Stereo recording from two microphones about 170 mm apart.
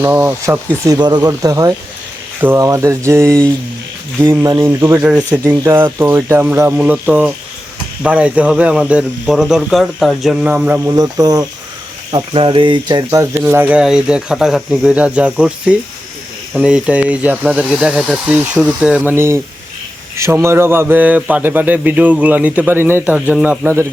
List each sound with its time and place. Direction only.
0.0 s a man's voice: 15° right (ahead or behind)
0.9 s a man's voice: 25° right (ahead or behind)
12.1 s a man's voice: 30° right (ahead or behind); by 23.9 s 15° right (ahead or behind)